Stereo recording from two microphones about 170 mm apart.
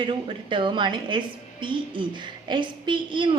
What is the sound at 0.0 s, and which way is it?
A woman's voice, 30° right (ahead or behind).